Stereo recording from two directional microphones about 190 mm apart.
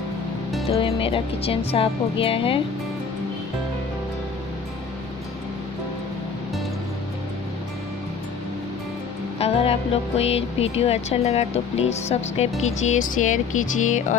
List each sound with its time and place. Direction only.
0.7 s speech: 30° left (ahead or behind)
9.4 s speech: 30° left (ahead or behind)